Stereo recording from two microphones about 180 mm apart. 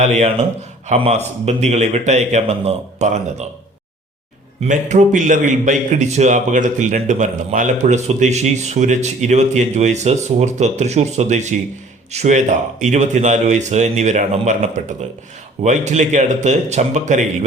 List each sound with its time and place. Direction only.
0.0 s a man's voice: 40° right (ahead or behind)
4.6 s a man's voice: 40° right (ahead or behind)